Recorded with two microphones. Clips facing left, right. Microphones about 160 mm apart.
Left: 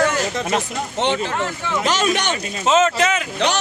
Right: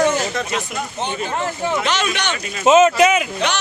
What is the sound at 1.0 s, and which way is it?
Speech, 80° left.